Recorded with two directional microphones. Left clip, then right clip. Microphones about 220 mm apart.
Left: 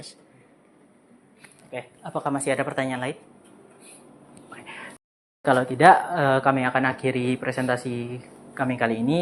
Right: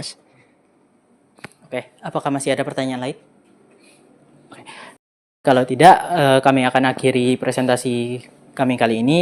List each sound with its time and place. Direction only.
1.7 s speech: 50° right (ahead or behind)
4.5 s a sound: 60° right (ahead or behind)
5.4 s speech: 55° right (ahead or behind)